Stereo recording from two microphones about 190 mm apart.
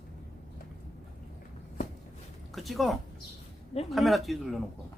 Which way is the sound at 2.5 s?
Centre (ahead or behind).